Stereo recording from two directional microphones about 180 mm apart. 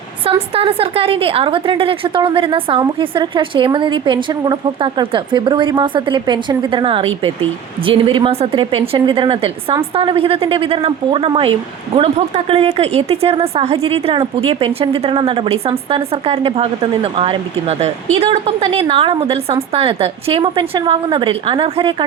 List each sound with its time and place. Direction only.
0.5 s a woman's voice: 30° right (ahead or behind)